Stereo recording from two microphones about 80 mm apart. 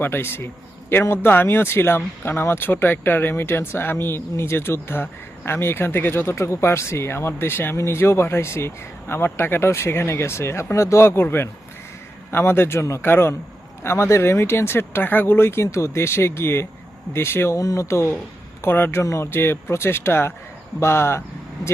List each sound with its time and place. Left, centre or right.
0.0 s a man's voice: left
17.6 s speech: left